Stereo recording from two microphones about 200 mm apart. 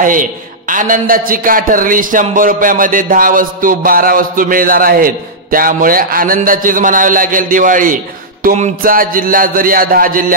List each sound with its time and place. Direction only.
0.0 s a man's voice: 40° right (ahead or behind)